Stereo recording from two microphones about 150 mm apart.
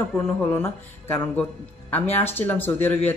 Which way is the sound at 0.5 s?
15° left (ahead or behind).